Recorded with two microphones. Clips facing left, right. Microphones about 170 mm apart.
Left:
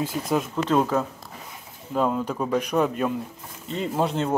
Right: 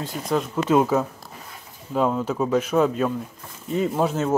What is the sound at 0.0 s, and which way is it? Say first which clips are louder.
Speech: even; 5° left (ahead or behind).